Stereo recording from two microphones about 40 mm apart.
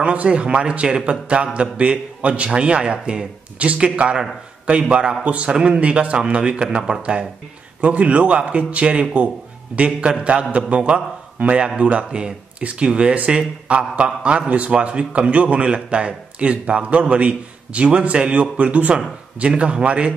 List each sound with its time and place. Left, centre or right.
0.0 s a man's voice: right